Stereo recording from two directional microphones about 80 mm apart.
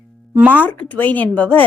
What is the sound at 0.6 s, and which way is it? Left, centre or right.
Speech, left.